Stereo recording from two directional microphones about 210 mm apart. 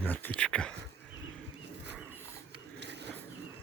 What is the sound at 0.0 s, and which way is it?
Speech, 10° left (ahead or behind).